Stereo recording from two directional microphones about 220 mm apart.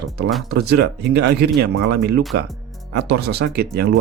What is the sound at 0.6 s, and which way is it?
Speech, 50° right (ahead or behind).